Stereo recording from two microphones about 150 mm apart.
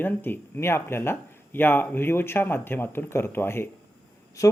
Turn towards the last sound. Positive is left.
turn(degrees=20)  # may be behind; listen again after turning